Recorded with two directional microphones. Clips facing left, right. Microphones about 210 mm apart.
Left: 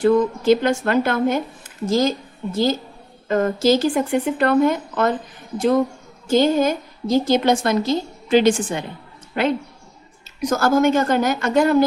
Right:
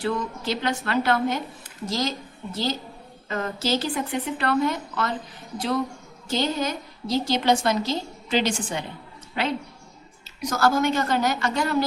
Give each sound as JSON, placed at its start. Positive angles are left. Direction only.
{"t": 0.0, "sound": "a woman's voice", "side_deg": 50}
{"t": 6.2, "sound": "a woman's voice", "side_deg": 50}
{"t": 10.6, "sound": "a woman's voice", "side_deg": 50}